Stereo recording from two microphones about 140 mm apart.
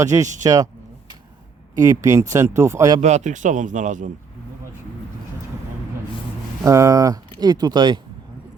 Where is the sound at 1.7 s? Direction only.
25° right (ahead or behind).